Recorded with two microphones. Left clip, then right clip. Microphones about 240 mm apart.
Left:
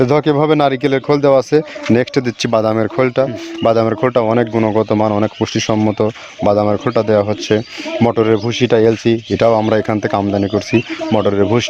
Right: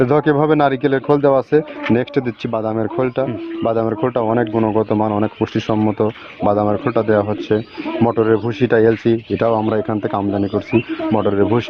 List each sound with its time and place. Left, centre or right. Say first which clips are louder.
0.0 s speech: left 2 dB; left